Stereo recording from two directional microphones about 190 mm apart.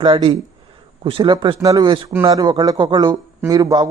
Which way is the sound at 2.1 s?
15° right (ahead or behind).